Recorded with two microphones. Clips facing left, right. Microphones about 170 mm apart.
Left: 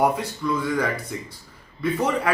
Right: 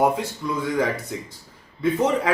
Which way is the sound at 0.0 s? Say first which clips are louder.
Right 1 dB; 20° right (ahead or behind).